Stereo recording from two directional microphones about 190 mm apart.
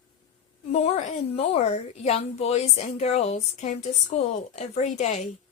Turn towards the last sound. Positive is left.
turn(degrees=35)  # may be behind; listen again after turning